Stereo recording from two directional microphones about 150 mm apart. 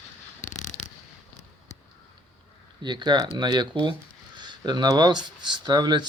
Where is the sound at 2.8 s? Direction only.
30° right (ahead or behind).